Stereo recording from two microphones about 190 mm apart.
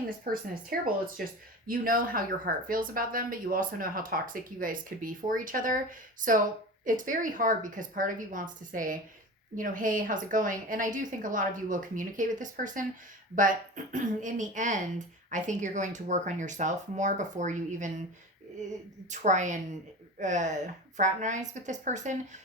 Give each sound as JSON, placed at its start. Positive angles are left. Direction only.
{"t": 0.3, "sound": "a woman's voice", "side_deg": -50}
{"t": 19.1, "sound": "a woman's voice", "side_deg": -40}